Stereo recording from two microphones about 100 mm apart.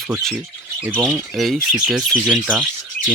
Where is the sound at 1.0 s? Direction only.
5° left (ahead or behind).